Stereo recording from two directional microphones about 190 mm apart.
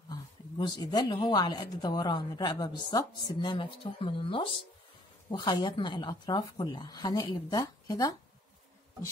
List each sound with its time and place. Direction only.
0.1 s a woman's voice: 20° left (ahead or behind)